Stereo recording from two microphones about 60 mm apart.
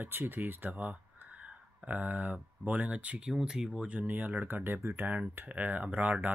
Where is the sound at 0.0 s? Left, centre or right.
Right.